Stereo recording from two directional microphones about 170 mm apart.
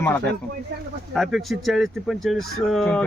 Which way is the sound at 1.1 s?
Centre (ahead or behind).